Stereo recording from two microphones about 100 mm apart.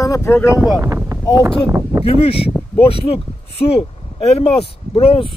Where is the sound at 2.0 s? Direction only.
70° left (ahead or behind).